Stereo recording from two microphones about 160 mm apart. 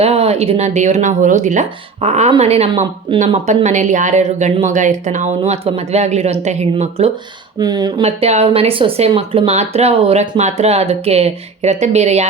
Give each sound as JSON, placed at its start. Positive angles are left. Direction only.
{"t": 0.0, "sound": "speech", "side_deg": -40}
{"t": 7.6, "sound": "speech", "side_deg": -25}
{"t": 8.0, "sound": "speech", "side_deg": -40}